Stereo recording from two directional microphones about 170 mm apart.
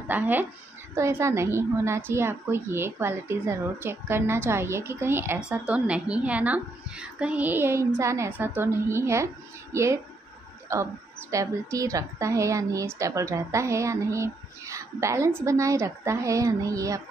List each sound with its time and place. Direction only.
0.1 s a woman's voice: 10° right (ahead or behind)